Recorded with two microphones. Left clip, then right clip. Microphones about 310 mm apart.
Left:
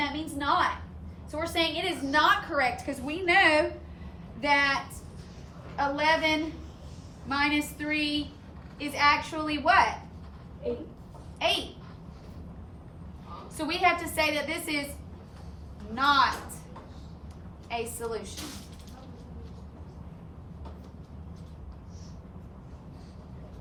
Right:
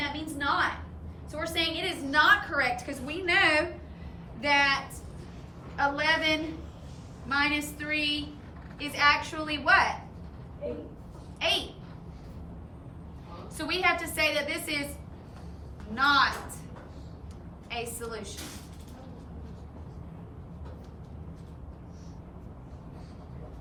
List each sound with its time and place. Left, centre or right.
0.0 s a sound: left
1.3 s a woman's voice: left
11.3 s a child's voice: centre
13.6 s a woman's voice: centre
16.0 s a woman's voice: centre
18.0 s a woman's voice: centre